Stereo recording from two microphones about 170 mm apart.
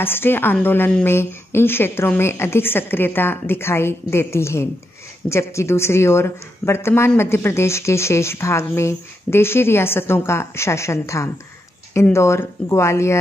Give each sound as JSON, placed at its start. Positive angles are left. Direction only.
{"t": 0.0, "sound": "speech", "side_deg": 10}